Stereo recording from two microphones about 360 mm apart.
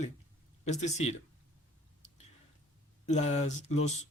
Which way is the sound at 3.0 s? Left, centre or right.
Centre.